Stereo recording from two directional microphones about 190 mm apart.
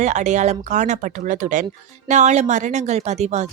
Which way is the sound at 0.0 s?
40° right (ahead or behind).